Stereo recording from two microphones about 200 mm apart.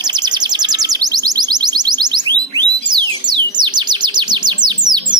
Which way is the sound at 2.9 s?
20° right (ahead or behind).